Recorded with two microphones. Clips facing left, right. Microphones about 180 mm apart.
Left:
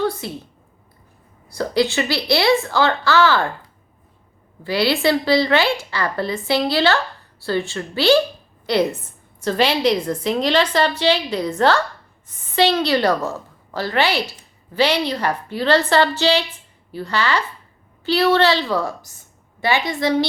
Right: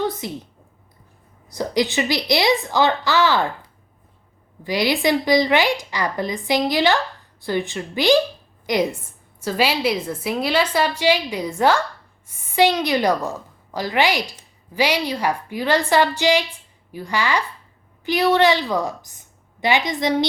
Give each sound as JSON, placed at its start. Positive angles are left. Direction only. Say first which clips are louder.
{"t": 0.0, "sound": "a sound", "louder": "left 2 dB", "side_deg": -20}
{"t": 1.5, "sound": "a woman's voice", "louder": "left 2 dB", "side_deg": -20}
{"t": 4.6, "sound": "a woman's voice", "louder": "left 1 dB", "side_deg": -15}